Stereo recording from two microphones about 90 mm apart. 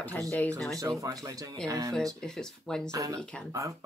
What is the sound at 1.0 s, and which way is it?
Speech, 40° right (ahead or behind).